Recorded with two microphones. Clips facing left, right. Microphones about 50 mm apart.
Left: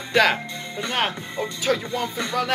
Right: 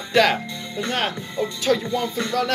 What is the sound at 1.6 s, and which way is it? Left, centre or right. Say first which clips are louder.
Speech: right 2 dB; centre.